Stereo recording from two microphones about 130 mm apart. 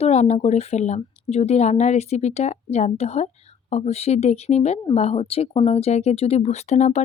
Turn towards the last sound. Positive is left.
turn(degrees=60)  # may be behind; listen again after turning